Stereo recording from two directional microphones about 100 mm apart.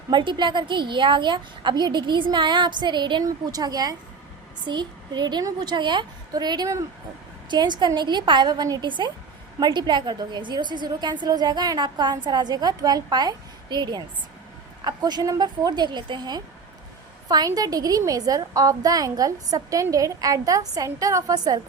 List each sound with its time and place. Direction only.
0.1 s a woman's voice: 50° right (ahead or behind)